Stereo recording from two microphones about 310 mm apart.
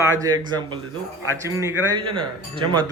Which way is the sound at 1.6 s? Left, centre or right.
Centre.